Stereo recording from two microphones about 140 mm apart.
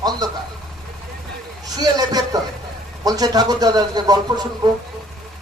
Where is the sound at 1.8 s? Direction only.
25° right (ahead or behind).